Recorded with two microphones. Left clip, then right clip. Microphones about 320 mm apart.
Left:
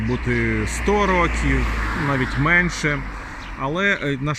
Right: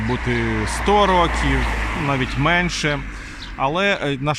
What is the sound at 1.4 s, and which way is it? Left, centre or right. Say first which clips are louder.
Speech: right 2 dB; right.